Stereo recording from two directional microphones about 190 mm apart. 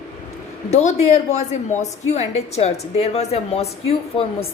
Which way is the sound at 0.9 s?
35° left (ahead or behind).